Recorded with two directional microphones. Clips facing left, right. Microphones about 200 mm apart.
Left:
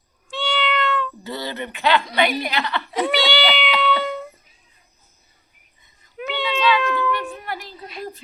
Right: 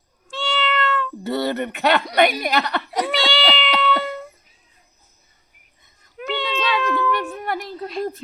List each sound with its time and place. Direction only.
0.3 s cat: centre (ahead or behind)
1.2 s a woman's voice: 60° right (ahead or behind); by 3.1 s 40° right (ahead or behind)
3.1 s speech: centre (ahead or behind)
3.8 s cat: centre (ahead or behind)
6.1 s cat: centre (ahead or behind)
7.3 s music: 55° right (ahead or behind)